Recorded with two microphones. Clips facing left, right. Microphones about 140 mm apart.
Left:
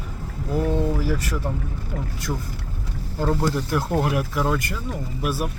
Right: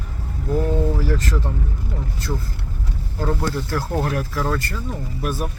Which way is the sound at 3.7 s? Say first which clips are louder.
Left 1 dB; 15° left (ahead or behind).